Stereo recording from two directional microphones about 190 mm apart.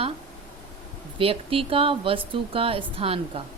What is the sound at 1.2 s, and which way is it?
A woman's voice, 30° right (ahead or behind).